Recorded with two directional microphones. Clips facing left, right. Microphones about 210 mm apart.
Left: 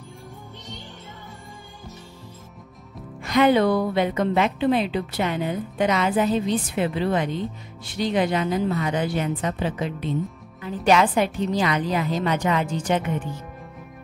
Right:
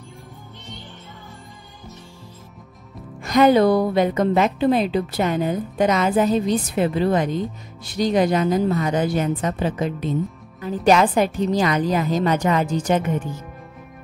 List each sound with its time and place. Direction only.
3.2 s a woman's voice: 40° right (ahead or behind)